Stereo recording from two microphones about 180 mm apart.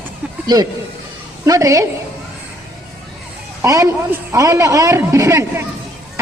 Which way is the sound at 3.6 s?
20° right (ahead or behind).